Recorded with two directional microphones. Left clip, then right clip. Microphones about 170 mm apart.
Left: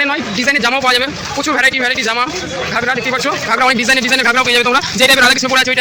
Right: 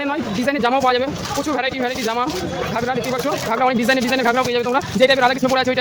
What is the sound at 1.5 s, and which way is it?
A man's voice, centre (ahead or behind).